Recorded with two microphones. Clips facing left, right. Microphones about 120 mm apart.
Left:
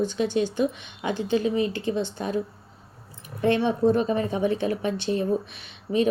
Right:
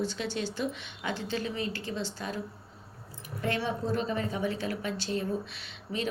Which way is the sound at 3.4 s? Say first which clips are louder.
Left 10 dB; 20° left (ahead or behind).